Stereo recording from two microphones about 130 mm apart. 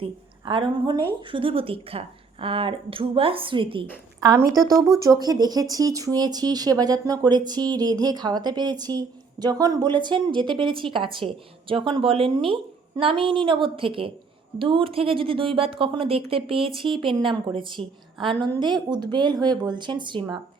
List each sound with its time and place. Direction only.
0.0 s a woman's voice: 40° right (ahead or behind)
5.0 s a woman's voice: 30° right (ahead or behind)